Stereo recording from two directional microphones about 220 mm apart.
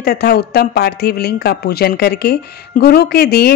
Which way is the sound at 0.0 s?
45° left (ahead or behind).